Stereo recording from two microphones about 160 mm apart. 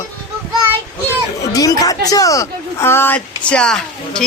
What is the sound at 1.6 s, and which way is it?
A man's voice, 20° left (ahead or behind).